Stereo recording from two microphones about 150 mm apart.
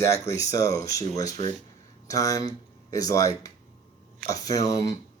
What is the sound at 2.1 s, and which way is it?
Speech, 20° left (ahead or behind).